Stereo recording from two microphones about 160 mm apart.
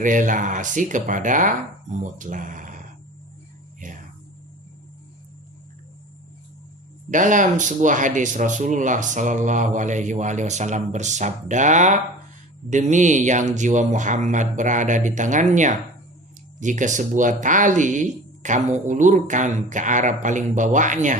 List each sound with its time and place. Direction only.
0.0 s speech: 55° right (ahead or behind)
3.8 s whispering: 55° right (ahead or behind)
7.1 s speech: 55° right (ahead or behind)